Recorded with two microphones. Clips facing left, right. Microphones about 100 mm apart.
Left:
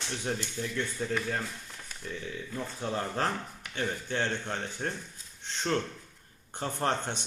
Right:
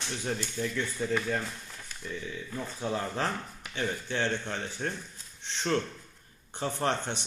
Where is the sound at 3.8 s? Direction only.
45° left (ahead or behind).